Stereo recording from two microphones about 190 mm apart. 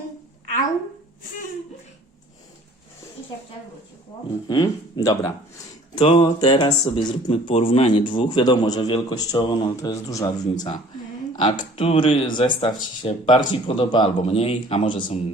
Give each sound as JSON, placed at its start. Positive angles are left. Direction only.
{"t": 4.4, "sound": "speech", "side_deg": 25}
{"t": 11.8, "sound": "speech", "side_deg": 30}